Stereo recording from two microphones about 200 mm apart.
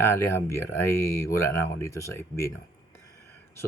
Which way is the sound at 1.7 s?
15° left (ahead or behind).